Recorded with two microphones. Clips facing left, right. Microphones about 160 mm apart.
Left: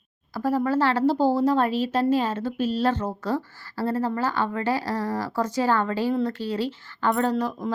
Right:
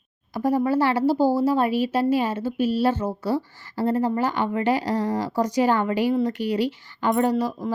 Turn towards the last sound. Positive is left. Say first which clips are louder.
# right 2 dB
turn(degrees=-10)  # may be behind; listen again after turning